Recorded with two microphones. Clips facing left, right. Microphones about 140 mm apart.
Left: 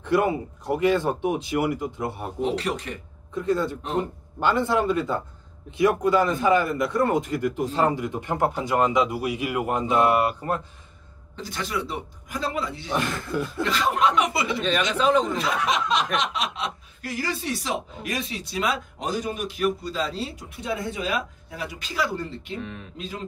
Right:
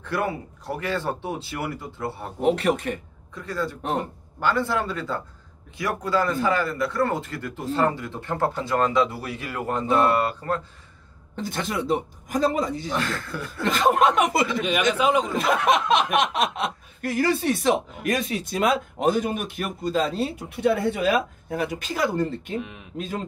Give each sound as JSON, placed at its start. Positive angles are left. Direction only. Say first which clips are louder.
{"t": 0.0, "sound": "speech", "louder": "left 5 dB", "side_deg": 20}
{"t": 2.4, "sound": "speech", "louder": "right 5 dB", "side_deg": -55}
{"t": 3.3, "sound": "a man's voice", "louder": "left 5 dB", "side_deg": 20}
{"t": 11.3, "sound": "speech", "louder": "right 2 dB", "side_deg": -55}
{"t": 12.9, "sound": "speech", "louder": "left 2 dB", "side_deg": 20}
{"t": 13.7, "sound": "speech", "louder": "right 5 dB", "side_deg": -50}
{"t": 14.6, "sound": "a man's voice", "louder": "left 2 dB", "side_deg": -10}
{"t": 15.3, "sound": "speech", "louder": "right 4 dB", "side_deg": -50}
{"t": 22.6, "sound": "a man's voice", "louder": "right 1 dB", "side_deg": -10}
{"t": 22.9, "sound": "speech", "louder": "right 7 dB", "side_deg": -50}